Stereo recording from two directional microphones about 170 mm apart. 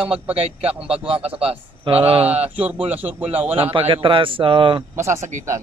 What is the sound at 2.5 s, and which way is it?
A man's voice, 10° right (ahead or behind).